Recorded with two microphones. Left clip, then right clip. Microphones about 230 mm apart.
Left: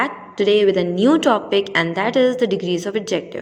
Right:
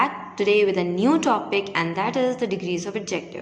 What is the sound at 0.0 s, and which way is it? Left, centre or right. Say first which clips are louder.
A woman's voice: left 3 dB; left.